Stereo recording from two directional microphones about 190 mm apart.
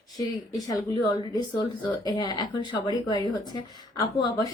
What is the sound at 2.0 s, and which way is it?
A woman's voice, 20° left (ahead or behind).